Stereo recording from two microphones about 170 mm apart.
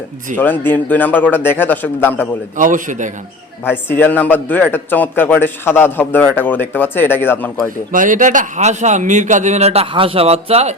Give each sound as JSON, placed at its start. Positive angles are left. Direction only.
{"t": 0.3, "sound": "a man's voice", "side_deg": 10}
{"t": 2.6, "sound": "a man's voice", "side_deg": -50}
{"t": 3.6, "sound": "a man's voice", "side_deg": 15}
{"t": 7.9, "sound": "a man's voice", "side_deg": -50}